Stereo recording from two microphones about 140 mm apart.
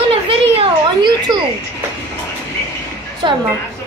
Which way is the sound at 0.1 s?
40° right (ahead or behind).